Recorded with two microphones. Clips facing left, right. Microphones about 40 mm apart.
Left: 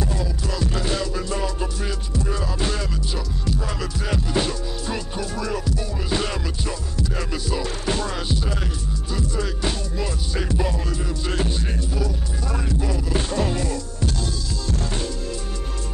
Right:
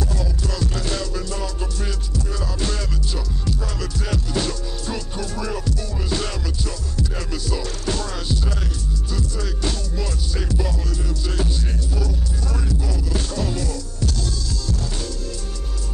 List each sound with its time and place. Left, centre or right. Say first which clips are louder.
0.0 s music: even; left
11.9 s music: even; centre